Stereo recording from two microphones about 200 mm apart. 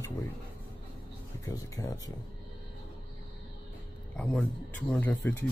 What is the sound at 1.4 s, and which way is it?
Speech, 15° left (ahead or behind).